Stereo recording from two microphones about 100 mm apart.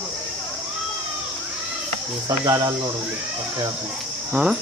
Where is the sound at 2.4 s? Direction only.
40° right (ahead or behind).